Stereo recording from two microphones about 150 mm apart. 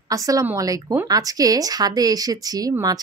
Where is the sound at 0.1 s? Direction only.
20° right (ahead or behind).